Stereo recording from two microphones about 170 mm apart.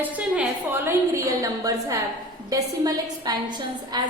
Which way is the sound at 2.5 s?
20° right (ahead or behind).